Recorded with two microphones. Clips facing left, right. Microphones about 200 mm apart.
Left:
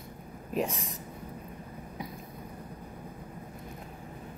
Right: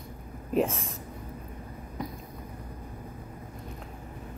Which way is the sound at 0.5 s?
Centre (ahead or behind).